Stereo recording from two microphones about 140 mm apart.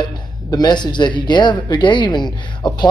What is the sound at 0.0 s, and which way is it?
A man's voice, 30° left (ahead or behind).